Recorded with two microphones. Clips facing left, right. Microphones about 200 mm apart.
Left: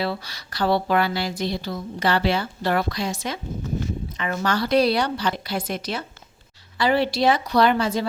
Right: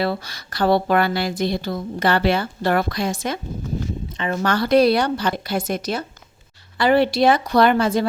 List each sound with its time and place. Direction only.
0.0 s speech: 50° right (ahead or behind)
4.4 s speech: 55° right (ahead or behind)
6.7 s speech: 55° right (ahead or behind)